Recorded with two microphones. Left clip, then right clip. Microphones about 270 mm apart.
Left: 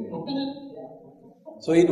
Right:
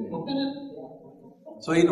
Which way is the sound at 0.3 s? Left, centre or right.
Left.